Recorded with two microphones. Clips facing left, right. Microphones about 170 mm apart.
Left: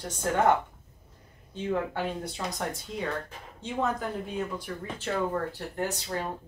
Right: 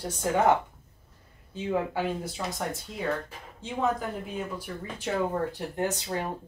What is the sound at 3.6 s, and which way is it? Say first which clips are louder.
Speech: right 1 dB; 5° right (ahead or behind).